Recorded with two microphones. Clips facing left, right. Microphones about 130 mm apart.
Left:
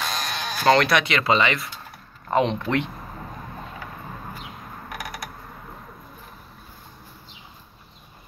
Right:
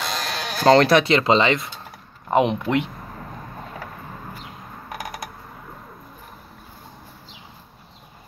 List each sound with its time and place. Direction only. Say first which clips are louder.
0.0 s sheep: right 1 dB; 90° right
0.7 s speech: right 4 dB; 30° right (ahead or behind); by 2.9 s 15° right (ahead or behind)